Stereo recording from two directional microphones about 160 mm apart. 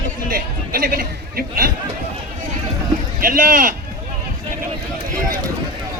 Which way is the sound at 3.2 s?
60° right (ahead or behind).